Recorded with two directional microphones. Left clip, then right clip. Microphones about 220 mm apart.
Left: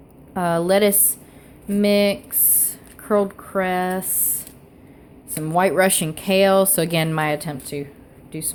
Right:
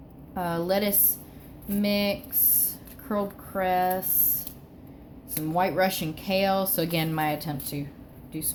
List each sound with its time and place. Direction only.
0.3 s speech: 45° left (ahead or behind)
2.6 s a sound: 45° left (ahead or behind)
5.5 s speech: 45° left (ahead or behind)